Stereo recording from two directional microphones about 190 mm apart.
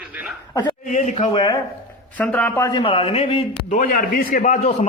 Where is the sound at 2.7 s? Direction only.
25° left (ahead or behind).